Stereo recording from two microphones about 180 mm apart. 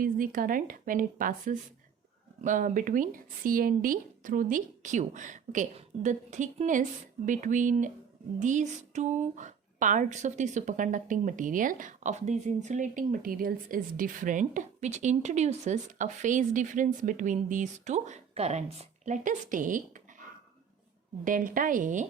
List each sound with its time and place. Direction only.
0.0 s a woman's voice: 50° right (ahead or behind)
21.2 s a woman's voice: 50° right (ahead or behind)